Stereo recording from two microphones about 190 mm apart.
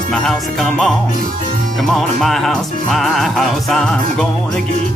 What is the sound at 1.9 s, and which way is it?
Music, centre (ahead or behind).